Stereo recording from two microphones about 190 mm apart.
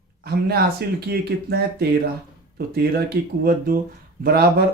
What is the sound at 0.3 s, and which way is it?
Speech, 55° right (ahead or behind).